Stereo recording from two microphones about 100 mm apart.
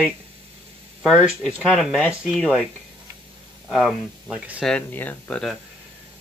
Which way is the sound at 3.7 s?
5° left (ahead or behind).